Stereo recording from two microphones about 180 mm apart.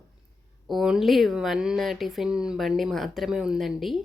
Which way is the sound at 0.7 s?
Centre (ahead or behind).